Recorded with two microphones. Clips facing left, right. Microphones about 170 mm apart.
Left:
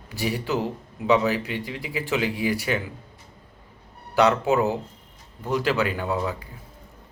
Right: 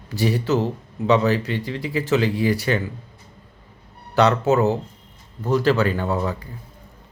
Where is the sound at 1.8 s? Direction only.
40° right (ahead or behind).